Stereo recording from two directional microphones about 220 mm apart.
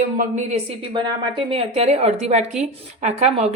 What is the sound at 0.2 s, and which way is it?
Speech, 30° right (ahead or behind).